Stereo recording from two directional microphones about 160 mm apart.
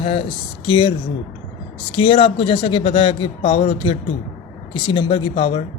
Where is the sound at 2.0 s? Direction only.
30° left (ahead or behind).